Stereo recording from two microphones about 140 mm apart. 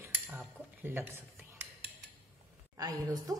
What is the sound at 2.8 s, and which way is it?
Speech, 25° right (ahead or behind).